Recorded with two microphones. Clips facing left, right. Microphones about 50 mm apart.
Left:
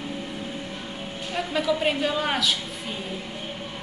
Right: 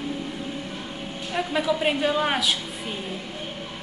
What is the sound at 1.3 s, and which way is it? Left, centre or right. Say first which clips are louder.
A woman's voice: right 1 dB; centre.